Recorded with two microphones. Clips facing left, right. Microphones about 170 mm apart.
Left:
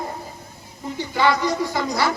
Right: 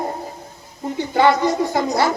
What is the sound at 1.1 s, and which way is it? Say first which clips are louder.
Speech: right 4 dB; 50° right (ahead or behind).